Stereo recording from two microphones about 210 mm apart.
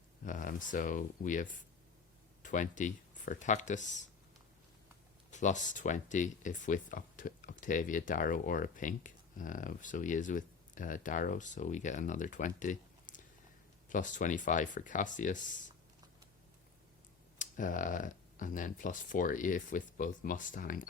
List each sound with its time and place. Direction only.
0.3 s speech: 40° left (ahead or behind)
5.3 s speech: 35° left (ahead or behind)
17.3 s speech: 40° left (ahead or behind)